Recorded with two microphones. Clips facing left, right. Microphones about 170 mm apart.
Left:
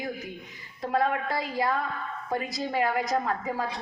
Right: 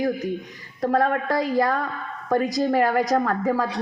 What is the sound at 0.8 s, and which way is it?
Speech, 60° right (ahead or behind).